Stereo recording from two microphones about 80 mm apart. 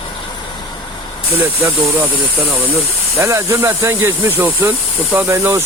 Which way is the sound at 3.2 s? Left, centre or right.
Right.